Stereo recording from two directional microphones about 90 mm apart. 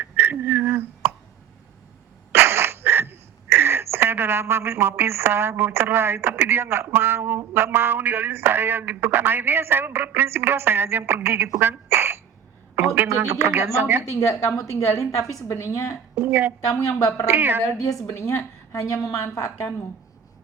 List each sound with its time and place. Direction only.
0.0 s a sound: 20° right (ahead or behind)
2.3 s a woman's voice: 25° right (ahead or behind)
14.1 s a woman's voice: 40° left (ahead or behind)
16.1 s a woman's voice: 25° right (ahead or behind)
16.7 s a woman's voice: 35° left (ahead or behind)
17.2 s a woman's voice: 25° right (ahead or behind)
17.8 s a woman's voice: 40° left (ahead or behind)